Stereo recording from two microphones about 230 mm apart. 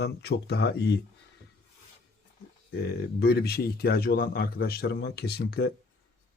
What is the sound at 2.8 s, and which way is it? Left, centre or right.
Speech, left.